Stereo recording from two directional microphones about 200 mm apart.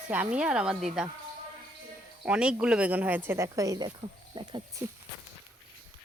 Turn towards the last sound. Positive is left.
turn(degrees=-25)  # may be behind; listen again after turning